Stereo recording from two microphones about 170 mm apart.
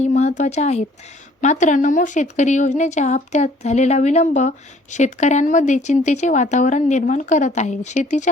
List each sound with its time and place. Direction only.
0.0 s a woman's voice: 40° left (ahead or behind)